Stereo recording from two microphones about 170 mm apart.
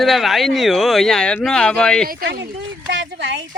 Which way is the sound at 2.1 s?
65° right (ahead or behind).